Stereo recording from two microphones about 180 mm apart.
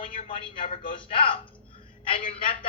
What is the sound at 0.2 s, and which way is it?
A man's voice, 30° left (ahead or behind).